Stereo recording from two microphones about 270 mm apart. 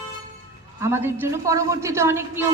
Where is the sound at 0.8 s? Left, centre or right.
Centre.